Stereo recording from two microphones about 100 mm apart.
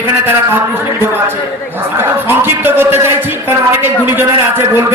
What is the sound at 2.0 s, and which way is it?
A man's voice, 25° right (ahead or behind).